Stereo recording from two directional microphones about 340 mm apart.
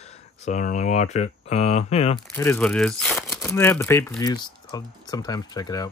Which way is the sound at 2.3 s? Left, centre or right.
Centre.